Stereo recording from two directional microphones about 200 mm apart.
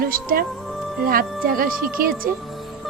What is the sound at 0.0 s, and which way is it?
Speech, 45° right (ahead or behind).